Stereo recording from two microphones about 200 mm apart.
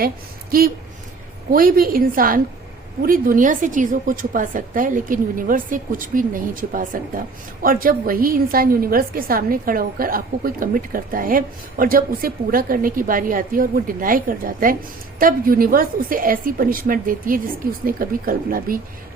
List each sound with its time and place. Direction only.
1.5 s a woman's voice: 45° right (ahead or behind)